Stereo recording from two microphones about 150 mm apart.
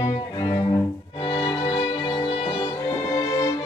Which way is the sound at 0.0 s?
25° left (ahead or behind).